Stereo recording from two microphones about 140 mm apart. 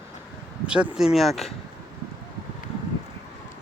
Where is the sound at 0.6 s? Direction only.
5° right (ahead or behind).